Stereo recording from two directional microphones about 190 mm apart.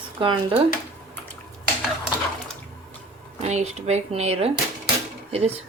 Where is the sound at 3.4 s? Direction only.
35° right (ahead or behind).